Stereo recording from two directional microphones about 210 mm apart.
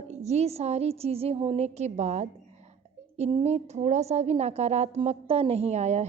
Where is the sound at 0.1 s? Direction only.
30° right (ahead or behind).